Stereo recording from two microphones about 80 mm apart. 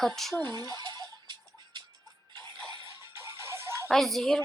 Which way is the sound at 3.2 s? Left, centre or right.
Right.